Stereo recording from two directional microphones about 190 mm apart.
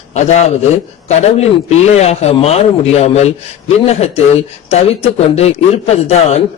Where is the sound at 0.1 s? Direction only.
35° left (ahead or behind).